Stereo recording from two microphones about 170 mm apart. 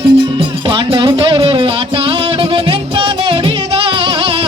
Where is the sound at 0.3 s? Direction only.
30° right (ahead or behind).